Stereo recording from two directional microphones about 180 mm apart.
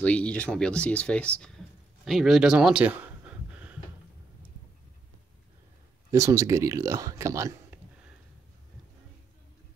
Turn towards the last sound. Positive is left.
turn(degrees=-15)  # may be behind; listen again after turning